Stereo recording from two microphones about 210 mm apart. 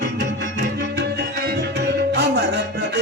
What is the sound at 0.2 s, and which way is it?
Tabla, 50° right (ahead or behind).